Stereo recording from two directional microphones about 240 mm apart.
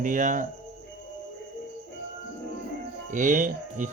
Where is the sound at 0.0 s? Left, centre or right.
Right.